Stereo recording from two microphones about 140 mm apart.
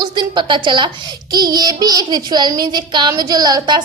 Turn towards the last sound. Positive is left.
turn(degrees=-30)  # may be behind; listen again after turning